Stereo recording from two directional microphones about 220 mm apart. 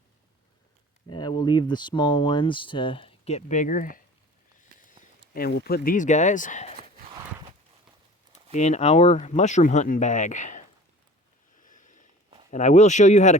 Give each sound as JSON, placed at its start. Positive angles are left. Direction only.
{"t": 1.0, "sound": "speech", "side_deg": 20}
{"t": 5.3, "sound": "speech", "side_deg": 45}
{"t": 8.5, "sound": "speech", "side_deg": 30}
{"t": 11.6, "sound": "a sound", "side_deg": 35}
{"t": 12.5, "sound": "speech", "side_deg": 35}